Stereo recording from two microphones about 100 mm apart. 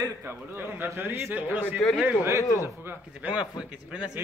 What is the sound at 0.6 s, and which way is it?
A man's voice, 20° right (ahead or behind).